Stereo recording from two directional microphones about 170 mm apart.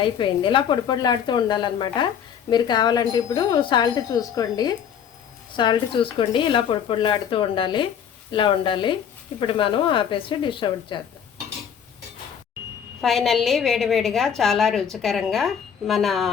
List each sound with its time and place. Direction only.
0.0 s speech: 30° left (ahead or behind)
13.0 s a woman's voice: centre (ahead or behind)